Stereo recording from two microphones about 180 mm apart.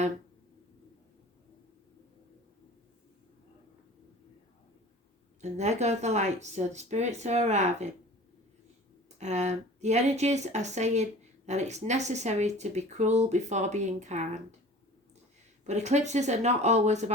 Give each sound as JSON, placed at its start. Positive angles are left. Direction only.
{"t": 5.4, "sound": "speech", "side_deg": -40}
{"t": 9.1, "sound": "speech", "side_deg": -40}
{"t": 15.6, "sound": "speech", "side_deg": -40}